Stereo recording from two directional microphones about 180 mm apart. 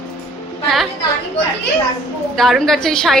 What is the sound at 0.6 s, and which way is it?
Speech, centre (ahead or behind).